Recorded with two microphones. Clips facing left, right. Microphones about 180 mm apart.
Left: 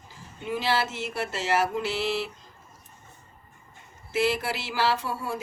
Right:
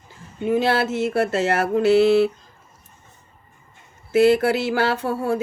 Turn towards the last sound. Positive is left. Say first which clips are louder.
# right 7 dB
turn(degrees=-60)  # may be behind; listen again after turning